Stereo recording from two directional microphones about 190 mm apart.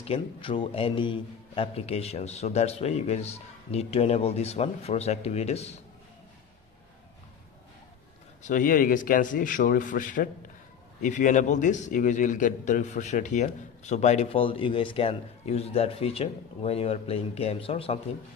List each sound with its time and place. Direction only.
0.0 s a man's voice: 30° left (ahead or behind)
8.4 s a man's voice: 40° left (ahead or behind)